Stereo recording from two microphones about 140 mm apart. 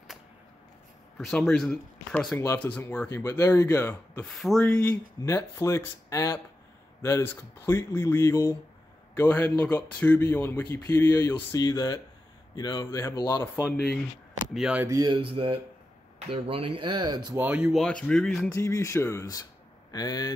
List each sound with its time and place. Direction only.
1.1 s speech: centre (ahead or behind)
4.3 s speech: centre (ahead or behind)
5.2 s speech: 20° left (ahead or behind)
14.5 s speech: 5° right (ahead or behind)
14.9 s speech: 25° right (ahead or behind)
15.1 s speech: 40° right (ahead or behind)
17.4 s speech: 10° right (ahead or behind)
17.7 s speech: 5° left (ahead or behind)
18.5 s speech: 20° left (ahead or behind)